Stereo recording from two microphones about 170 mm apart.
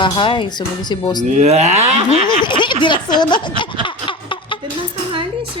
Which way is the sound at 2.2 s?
30° left (ahead or behind).